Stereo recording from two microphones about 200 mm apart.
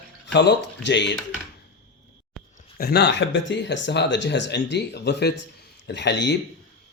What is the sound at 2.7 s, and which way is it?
Speech, 50° left (ahead or behind).